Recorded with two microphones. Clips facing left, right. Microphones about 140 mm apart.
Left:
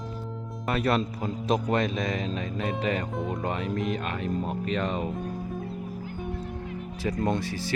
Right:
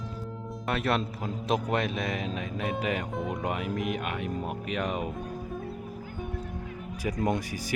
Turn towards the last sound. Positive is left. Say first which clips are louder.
# left 1 dB
turn(degrees=-15)  # may be behind; listen again after turning